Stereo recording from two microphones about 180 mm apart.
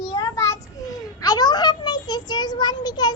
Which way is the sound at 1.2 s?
20° left (ahead or behind).